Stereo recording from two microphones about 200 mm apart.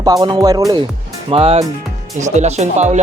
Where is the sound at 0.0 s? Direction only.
20° right (ahead or behind).